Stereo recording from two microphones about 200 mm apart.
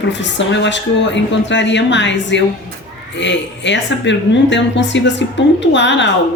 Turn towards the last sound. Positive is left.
turn(degrees=65)  # may be behind; listen again after turning